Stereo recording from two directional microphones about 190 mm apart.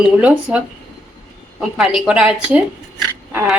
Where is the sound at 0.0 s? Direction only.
5° right (ahead or behind).